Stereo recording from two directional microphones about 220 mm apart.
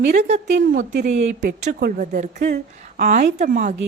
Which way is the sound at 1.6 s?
35° right (ahead or behind).